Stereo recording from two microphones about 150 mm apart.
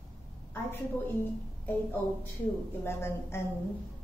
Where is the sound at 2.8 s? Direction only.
15° left (ahead or behind).